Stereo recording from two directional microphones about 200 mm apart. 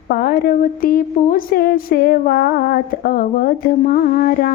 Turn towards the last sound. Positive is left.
turn(degrees=45)  # may be behind; listen again after turning